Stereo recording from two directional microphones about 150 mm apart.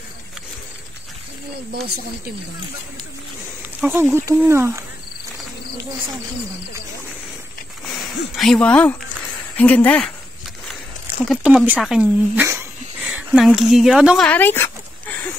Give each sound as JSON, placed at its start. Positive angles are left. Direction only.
{"t": 3.9, "sound": "speech", "side_deg": -15}
{"t": 7.8, "sound": "speech", "side_deg": 0}
{"t": 11.2, "sound": "speech", "side_deg": -10}
{"t": 14.2, "sound": "dog", "side_deg": 10}